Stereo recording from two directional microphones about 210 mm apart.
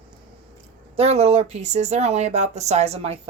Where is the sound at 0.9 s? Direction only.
30° right (ahead or behind).